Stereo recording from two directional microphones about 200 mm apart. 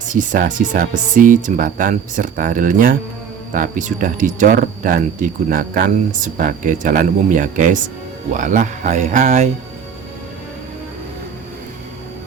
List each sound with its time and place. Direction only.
0.1 s speech: 40° right (ahead or behind)